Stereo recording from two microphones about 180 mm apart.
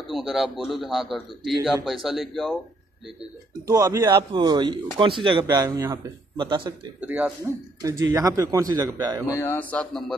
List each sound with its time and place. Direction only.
0.1 s a man's voice: centre (ahead or behind)
3.6 s speech: 20° right (ahead or behind)
7.0 s speech: 10° right (ahead or behind)
9.3 s speech: 15° left (ahead or behind)